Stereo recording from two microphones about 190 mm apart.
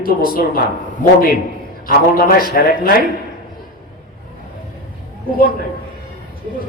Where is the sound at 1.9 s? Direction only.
55° left (ahead or behind).